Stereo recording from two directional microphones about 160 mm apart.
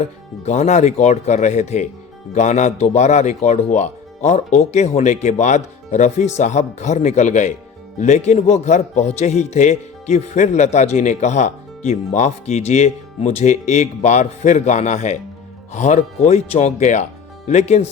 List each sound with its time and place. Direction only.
0.4 s speech: 45° left (ahead or behind)